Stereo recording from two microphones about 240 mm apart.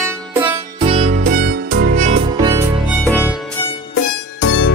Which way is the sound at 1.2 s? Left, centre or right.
Right.